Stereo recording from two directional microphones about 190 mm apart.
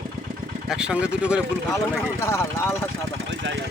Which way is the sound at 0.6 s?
5° right (ahead or behind).